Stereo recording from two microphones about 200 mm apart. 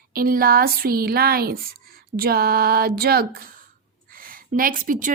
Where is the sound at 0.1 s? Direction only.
45° right (ahead or behind).